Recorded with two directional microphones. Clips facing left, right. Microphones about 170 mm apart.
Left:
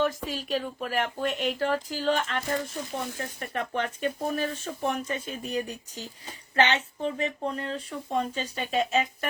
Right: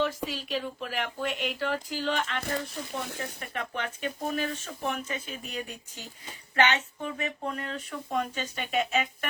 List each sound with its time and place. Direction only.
0.0 s speech: 45° left (ahead or behind)